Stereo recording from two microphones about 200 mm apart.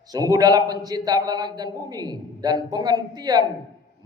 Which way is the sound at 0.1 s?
20° right (ahead or behind).